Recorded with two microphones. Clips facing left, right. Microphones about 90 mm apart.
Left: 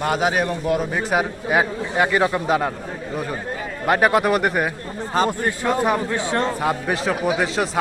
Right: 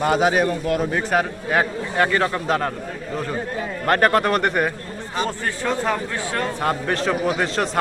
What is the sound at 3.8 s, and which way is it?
A man's voice, 5° left (ahead or behind).